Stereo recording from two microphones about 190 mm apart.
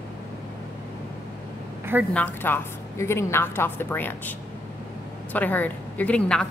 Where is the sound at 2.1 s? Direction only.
10° left (ahead or behind).